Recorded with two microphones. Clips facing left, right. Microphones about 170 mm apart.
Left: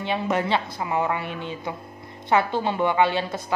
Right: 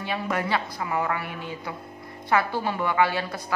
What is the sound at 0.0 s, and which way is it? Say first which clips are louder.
A woman's voice: left 3 dB; 25° left (ahead or behind).